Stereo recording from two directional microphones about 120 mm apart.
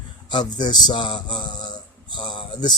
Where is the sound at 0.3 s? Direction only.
40° left (ahead or behind).